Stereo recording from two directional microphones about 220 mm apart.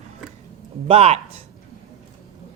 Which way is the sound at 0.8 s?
25° right (ahead or behind).